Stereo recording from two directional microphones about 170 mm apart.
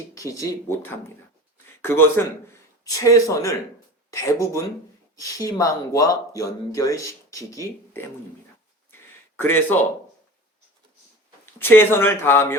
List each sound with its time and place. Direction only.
0.1 s a man's voice: 20° left (ahead or behind)
8.9 s a sound: 10° left (ahead or behind)
11.6 s a man's voice: 15° left (ahead or behind)